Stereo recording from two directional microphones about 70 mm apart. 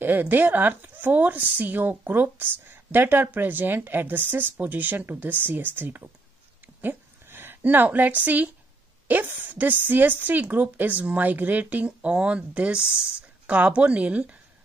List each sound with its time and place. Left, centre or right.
0.0 s speech: right
6.8 s a sound: right
9.0 s speech: right